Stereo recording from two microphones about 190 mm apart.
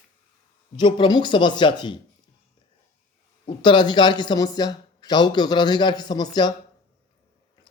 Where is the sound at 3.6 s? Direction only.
25° left (ahead or behind).